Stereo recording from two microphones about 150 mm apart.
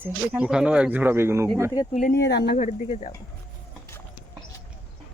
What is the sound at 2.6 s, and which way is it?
Speech, 50° left (ahead or behind).